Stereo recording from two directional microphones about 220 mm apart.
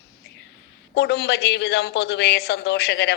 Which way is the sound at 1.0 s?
50° left (ahead or behind).